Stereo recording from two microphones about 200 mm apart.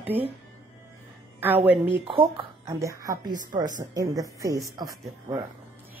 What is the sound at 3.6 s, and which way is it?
Speech, 40° right (ahead or behind).